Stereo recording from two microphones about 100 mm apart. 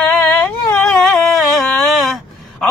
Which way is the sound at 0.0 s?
15° left (ahead or behind).